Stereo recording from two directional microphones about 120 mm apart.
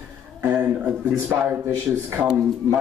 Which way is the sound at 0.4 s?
15° right (ahead or behind).